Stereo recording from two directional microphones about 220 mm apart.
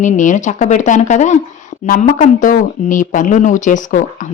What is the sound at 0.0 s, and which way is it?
Speech, 35° left (ahead or behind).